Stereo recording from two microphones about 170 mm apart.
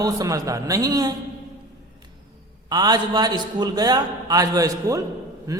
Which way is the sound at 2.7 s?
25° right (ahead or behind).